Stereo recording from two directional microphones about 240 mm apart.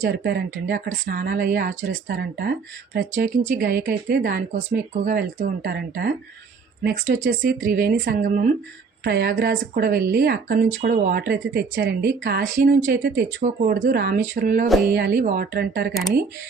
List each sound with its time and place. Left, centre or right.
0.0 s speech: right
7.3 s speech: right